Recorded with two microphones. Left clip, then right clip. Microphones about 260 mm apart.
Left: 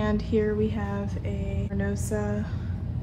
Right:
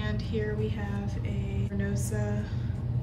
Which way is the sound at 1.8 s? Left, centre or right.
Centre.